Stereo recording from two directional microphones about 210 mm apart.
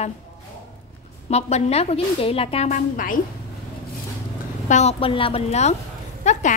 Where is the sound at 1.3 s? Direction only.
30° left (ahead or behind).